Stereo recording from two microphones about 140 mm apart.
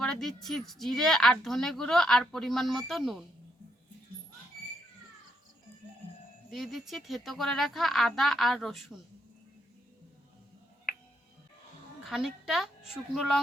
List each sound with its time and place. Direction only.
0.0 s speech: 5° left (ahead or behind)
6.5 s speech: centre (ahead or behind)
12.0 s a woman's voice: centre (ahead or behind)